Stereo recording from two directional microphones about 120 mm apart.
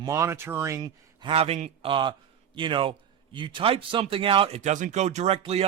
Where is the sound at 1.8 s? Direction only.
40° right (ahead or behind).